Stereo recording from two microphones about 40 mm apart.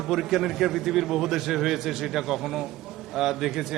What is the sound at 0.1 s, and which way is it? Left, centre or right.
A man's voice, centre.